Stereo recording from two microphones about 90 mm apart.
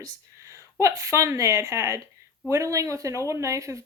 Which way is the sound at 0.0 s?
35° right (ahead or behind).